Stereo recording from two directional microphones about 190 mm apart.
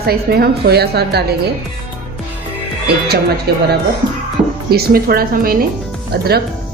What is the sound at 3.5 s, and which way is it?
Speech, 55° right (ahead or behind).